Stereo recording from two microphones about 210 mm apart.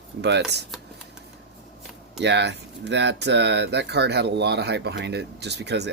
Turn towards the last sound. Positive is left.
turn(degrees=-55)  # may be behind; listen again after turning